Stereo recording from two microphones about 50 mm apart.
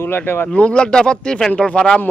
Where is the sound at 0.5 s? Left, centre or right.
Left.